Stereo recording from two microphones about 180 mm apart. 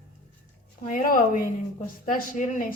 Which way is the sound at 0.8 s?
50° left (ahead or behind).